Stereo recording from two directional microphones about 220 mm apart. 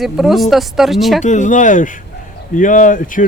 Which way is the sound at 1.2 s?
35° left (ahead or behind).